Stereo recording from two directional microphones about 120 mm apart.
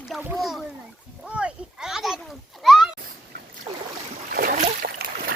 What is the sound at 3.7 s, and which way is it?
Boat, 35° right (ahead or behind).